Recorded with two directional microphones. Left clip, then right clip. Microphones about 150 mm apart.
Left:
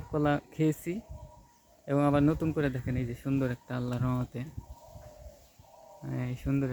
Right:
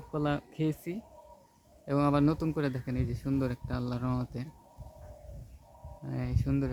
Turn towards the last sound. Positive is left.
turn(degrees=5)  # may be behind; listen again after turning